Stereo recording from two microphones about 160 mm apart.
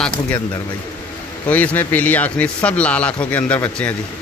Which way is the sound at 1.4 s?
10° left (ahead or behind).